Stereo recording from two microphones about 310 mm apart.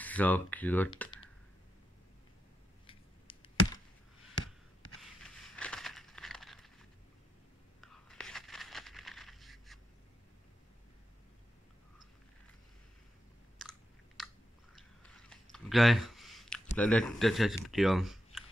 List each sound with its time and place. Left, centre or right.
0.0 s speech: centre
2.9 s chop: centre
5.2 s a sound: centre
7.8 s whispering: centre
13.6 s chewing: centre
16.7 s speech: centre